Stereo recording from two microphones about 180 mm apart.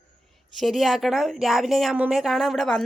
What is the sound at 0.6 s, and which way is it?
A woman's voice, centre (ahead or behind).